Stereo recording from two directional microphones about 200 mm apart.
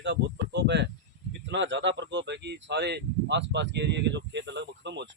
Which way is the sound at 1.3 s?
65° right (ahead or behind).